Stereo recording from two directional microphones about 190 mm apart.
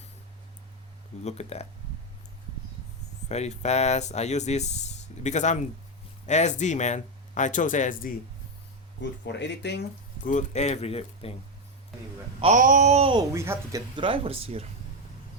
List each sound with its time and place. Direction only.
1.2 s speech: 35° left (ahead or behind)
3.2 s speech: 35° left (ahead or behind)
9.0 s speech: 65° left (ahead or behind)
10.2 s speech: 40° left (ahead or behind)
12.4 s a sound: 40° right (ahead or behind)
13.3 s speech: 15° right (ahead or behind)
13.9 s speech: 25° right (ahead or behind)